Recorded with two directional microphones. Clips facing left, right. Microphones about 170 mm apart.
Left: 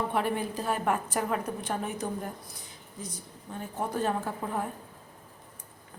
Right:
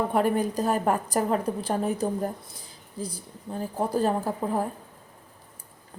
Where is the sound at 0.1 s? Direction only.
40° right (ahead or behind).